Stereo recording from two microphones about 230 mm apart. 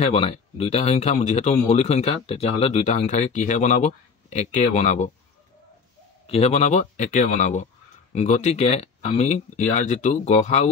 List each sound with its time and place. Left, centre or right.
0.0 s speech: left
6.2 s a man's voice: left